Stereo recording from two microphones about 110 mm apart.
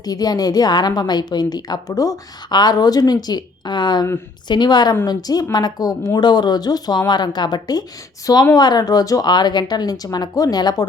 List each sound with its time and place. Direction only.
0.0 s a woman's voice: 35° left (ahead or behind)